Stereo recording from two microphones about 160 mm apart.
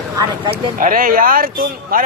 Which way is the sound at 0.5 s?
60° right (ahead or behind).